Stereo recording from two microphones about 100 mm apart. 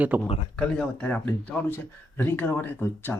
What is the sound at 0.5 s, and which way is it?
Speech, 15° left (ahead or behind).